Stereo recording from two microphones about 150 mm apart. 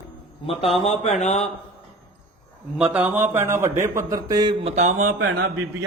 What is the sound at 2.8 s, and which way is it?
A man's voice, 5° right (ahead or behind).